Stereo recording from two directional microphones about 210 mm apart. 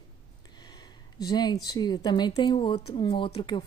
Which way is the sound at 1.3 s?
20° left (ahead or behind).